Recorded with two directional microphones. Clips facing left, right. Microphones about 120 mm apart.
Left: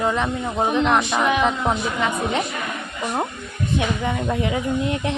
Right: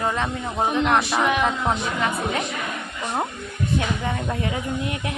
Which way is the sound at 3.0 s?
10° left (ahead or behind).